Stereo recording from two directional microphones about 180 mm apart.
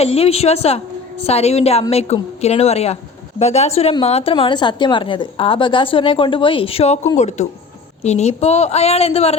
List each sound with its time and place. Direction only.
0.0 s a woman's voice: 35° left (ahead or behind)